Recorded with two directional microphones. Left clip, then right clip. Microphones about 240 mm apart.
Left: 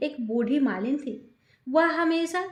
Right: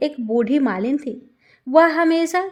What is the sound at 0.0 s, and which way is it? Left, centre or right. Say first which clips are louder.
A woman's voice: right 8 dB; right.